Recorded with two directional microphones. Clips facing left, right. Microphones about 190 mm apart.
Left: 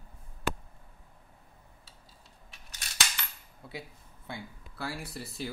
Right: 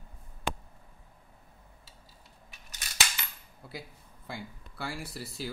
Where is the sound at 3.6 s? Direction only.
Centre (ahead or behind).